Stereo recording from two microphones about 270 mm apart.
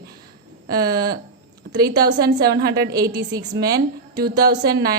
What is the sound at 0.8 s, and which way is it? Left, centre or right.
A woman's voice, centre.